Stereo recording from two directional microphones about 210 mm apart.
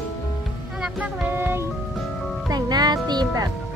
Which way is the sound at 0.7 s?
5° right (ahead or behind).